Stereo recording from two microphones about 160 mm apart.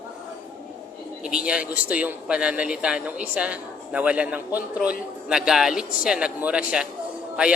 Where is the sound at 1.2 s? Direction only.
5° right (ahead or behind).